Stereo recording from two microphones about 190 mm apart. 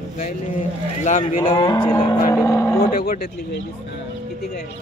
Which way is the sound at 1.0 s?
40° left (ahead or behind).